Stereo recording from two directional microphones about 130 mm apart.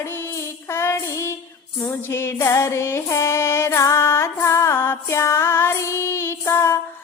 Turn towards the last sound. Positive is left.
turn(degrees=20)  # may be behind; listen again after turning